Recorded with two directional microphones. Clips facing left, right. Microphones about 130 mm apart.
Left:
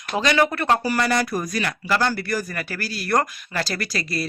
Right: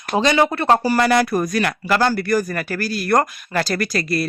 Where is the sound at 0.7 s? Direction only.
35° right (ahead or behind).